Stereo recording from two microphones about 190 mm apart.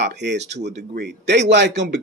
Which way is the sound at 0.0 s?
65° right (ahead or behind).